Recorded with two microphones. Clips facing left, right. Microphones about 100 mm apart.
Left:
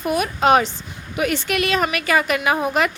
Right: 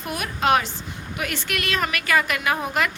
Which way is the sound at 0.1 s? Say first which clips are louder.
Left 5 dB; 20° left (ahead or behind).